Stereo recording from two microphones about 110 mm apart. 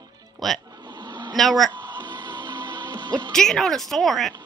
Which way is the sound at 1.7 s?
40° right (ahead or behind).